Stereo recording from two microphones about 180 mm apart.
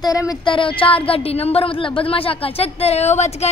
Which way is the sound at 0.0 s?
20° left (ahead or behind).